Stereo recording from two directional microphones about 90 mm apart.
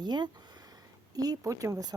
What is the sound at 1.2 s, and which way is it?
Speech, 40° right (ahead or behind).